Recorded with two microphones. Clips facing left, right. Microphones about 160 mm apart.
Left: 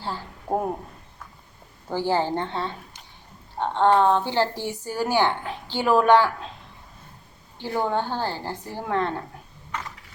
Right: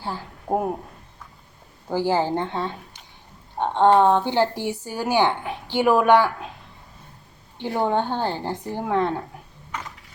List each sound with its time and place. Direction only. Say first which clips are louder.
0.0 s a woman's voice: right 1 dB; 10° right (ahead or behind)
1.9 s speech: right 2 dB; 15° right (ahead or behind)
7.6 s speech: right 3 dB; 20° right (ahead or behind)